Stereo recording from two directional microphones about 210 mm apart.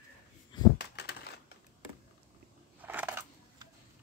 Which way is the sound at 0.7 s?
50° left (ahead or behind).